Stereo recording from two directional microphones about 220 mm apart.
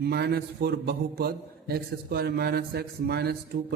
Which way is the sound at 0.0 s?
45° right (ahead or behind).